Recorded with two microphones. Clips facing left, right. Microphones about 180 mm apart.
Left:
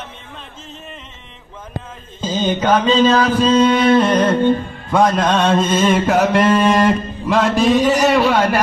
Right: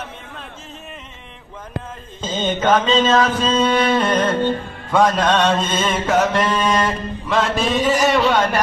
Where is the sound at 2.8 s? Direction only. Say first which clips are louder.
Left 2 dB; 25° right (ahead or behind).